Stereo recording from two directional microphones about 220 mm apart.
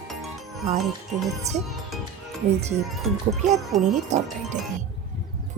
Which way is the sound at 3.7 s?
Centre (ahead or behind).